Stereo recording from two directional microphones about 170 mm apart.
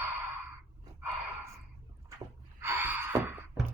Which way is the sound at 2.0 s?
15° right (ahead or behind).